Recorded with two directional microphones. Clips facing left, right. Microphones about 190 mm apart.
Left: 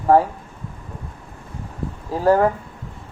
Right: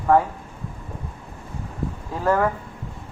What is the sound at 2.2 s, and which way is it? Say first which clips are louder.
Speech: left 5 dB; 35° left (ahead or behind).